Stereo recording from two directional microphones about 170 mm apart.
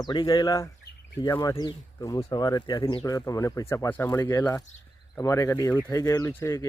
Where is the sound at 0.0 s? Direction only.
25° left (ahead or behind).